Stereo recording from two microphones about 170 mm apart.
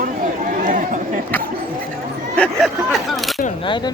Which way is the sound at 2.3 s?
5° left (ahead or behind).